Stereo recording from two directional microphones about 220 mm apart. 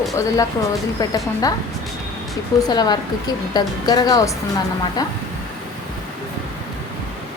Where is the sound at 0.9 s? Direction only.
15° left (ahead or behind).